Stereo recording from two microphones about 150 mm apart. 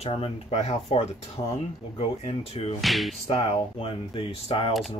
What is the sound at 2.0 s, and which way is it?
Speech, 40° left (ahead or behind).